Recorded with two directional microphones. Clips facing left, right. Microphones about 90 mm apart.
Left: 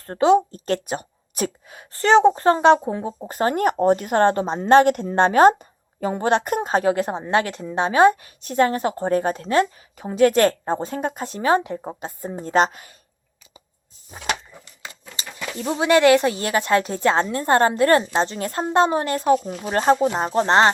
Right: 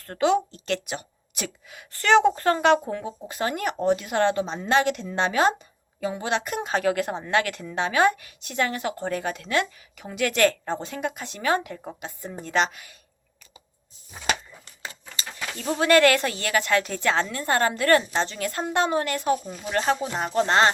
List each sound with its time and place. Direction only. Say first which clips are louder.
0.0 s a woman's voice: left 6 dB; 35° left (ahead or behind)
3.1 s a woman's voice: left 7 dB; 40° left (ahead or behind)
15.1 s speech: left 4 dB; 25° left (ahead or behind)
19.4 s speech: left 6 dB; 70° left (ahead or behind)
19.6 s a woman's voice: left 6 dB; 35° left (ahead or behind)